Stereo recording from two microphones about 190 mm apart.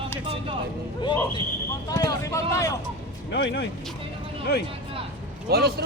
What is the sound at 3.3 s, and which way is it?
Speech, 65° left (ahead or behind).